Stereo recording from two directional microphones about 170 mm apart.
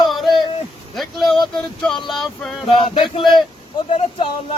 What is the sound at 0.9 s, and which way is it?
Vehicle, centre (ahead or behind).